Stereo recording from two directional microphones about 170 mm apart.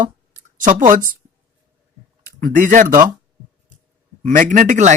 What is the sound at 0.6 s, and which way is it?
Speech, 50° right (ahead or behind).